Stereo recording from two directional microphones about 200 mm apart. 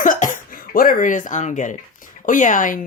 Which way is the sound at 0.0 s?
40° left (ahead or behind).